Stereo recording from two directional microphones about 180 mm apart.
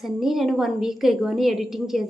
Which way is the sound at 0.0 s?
Centre (ahead or behind).